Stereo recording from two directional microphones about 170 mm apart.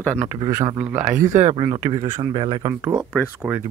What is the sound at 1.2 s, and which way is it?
Speech, 40° right (ahead or behind).